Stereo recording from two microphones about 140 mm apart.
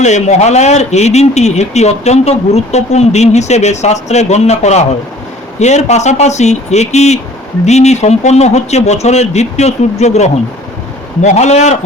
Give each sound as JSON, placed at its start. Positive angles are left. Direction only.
{"t": 0.0, "sound": "a man's voice", "side_deg": 55}